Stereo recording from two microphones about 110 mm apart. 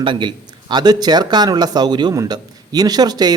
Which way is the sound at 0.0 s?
45° right (ahead or behind).